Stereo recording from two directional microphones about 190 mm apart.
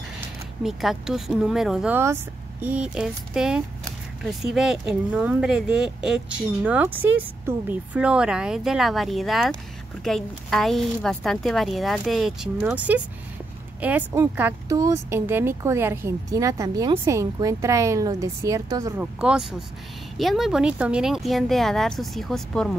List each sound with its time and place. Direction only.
0.7 s speech: centre (ahead or behind); by 18.9 s 20° right (ahead or behind)
18.9 s speech: 5° right (ahead or behind)